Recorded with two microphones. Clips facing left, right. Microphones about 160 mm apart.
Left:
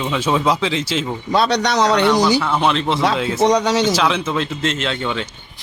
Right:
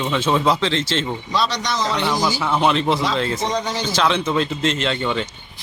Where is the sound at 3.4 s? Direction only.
80° left.